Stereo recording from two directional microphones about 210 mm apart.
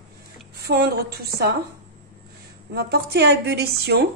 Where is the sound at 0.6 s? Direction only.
50° right (ahead or behind).